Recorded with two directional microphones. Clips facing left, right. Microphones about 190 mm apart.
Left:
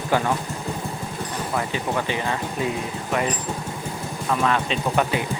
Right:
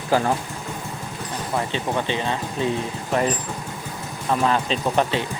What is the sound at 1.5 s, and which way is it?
Speech, 25° right (ahead or behind).